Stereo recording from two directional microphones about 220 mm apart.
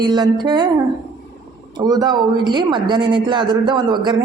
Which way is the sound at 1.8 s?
20° right (ahead or behind).